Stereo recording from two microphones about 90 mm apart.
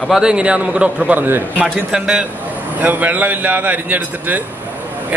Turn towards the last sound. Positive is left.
turn(degrees=-20)  # may be behind; listen again after turning